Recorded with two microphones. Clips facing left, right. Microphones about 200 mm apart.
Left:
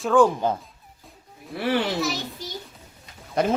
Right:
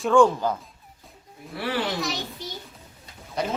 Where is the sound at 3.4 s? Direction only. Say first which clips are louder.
Left 6 dB; 50° left (ahead or behind).